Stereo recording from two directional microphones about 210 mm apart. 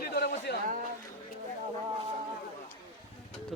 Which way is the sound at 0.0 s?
50° left (ahead or behind).